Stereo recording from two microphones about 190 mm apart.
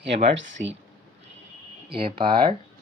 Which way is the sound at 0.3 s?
75° right (ahead or behind).